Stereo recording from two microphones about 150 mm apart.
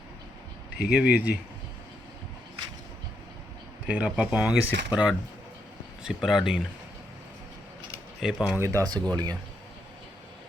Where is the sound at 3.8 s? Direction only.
5° right (ahead or behind).